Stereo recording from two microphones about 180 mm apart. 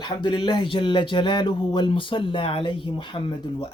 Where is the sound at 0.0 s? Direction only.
25° left (ahead or behind).